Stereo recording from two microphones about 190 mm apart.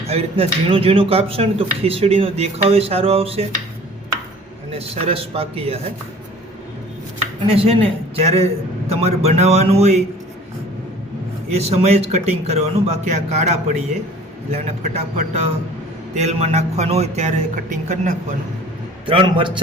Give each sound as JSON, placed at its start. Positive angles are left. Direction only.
{"t": 0.1, "sound": "speech", "side_deg": -30}
{"t": 5.1, "sound": "speech", "side_deg": -30}
{"t": 7.5, "sound": "speech", "side_deg": -30}
{"t": 11.7, "sound": "speech", "side_deg": -35}
{"t": 19.0, "sound": "a man's voice", "side_deg": -25}